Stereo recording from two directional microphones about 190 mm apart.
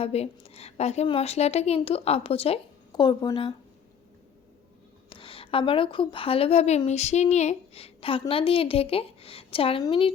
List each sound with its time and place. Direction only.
0.0 s a woman's voice: 30° left (ahead or behind)
5.0 s a woman's voice: 25° left (ahead or behind)